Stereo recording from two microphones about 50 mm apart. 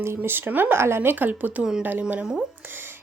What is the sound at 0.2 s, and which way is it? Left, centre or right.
Speech, right.